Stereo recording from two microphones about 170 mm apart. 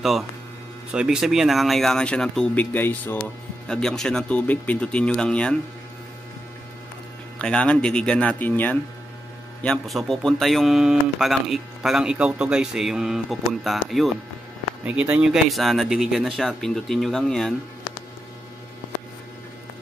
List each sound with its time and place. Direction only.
0.9 s a man's voice: 5° right (ahead or behind)
7.3 s a man's voice: 5° left (ahead or behind)